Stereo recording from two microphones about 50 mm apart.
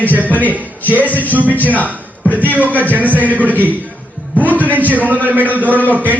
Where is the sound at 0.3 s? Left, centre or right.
Left.